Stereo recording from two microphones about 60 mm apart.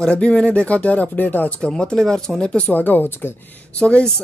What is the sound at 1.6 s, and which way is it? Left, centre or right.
Speech, centre.